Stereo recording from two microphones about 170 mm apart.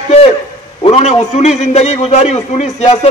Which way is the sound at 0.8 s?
35° left (ahead or behind).